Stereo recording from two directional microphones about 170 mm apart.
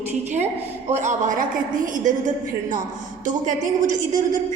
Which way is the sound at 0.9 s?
45° right (ahead or behind).